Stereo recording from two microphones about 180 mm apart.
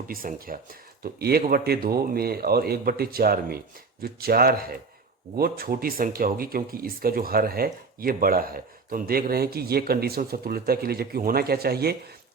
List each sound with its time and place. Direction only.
0.1 s speech: 55° right (ahead or behind)